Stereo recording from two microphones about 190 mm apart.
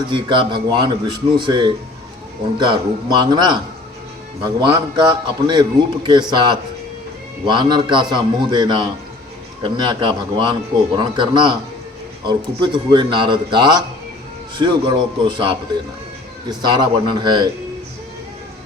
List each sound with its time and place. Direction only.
0.1 s speech: 25° right (ahead or behind)
4.6 s speech: 25° right (ahead or behind)